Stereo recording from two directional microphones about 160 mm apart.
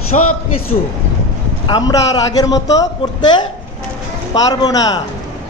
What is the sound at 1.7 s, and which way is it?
A man's voice, 25° left (ahead or behind).